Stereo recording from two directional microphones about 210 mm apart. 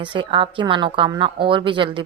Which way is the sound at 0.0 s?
25° right (ahead or behind).